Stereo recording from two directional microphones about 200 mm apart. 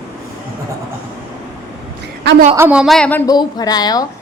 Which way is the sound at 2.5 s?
10° right (ahead or behind).